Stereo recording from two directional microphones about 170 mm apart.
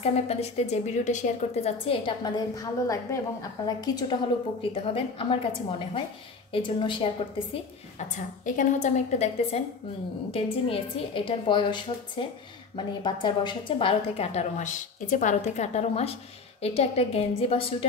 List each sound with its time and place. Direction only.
0.0 s a woman's voice: 40° left (ahead or behind)
1.9 s a woman's voice: 25° left (ahead or behind)
8.5 s a woman's voice: 45° left (ahead or behind)